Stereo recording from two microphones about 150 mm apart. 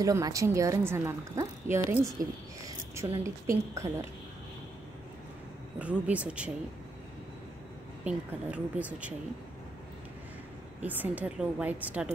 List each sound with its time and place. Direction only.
0.0 s speech: 25° right (ahead or behind)
3.3 s speech: 20° right (ahead or behind)
5.8 s a woman's voice: 10° right (ahead or behind)
8.0 s a woman's voice: 10° right (ahead or behind)
10.8 s a woman's voice: 10° right (ahead or behind)